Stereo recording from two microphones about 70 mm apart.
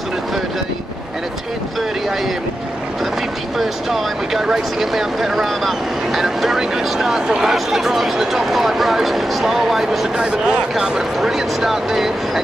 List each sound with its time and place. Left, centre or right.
3.5 s speech: centre